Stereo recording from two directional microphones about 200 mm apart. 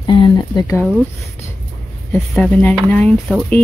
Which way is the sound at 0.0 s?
20° left (ahead or behind).